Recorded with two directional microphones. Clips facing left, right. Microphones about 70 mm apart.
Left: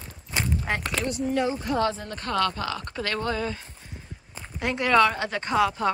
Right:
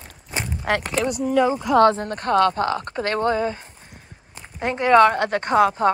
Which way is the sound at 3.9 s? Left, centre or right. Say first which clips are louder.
Left 2 dB; right.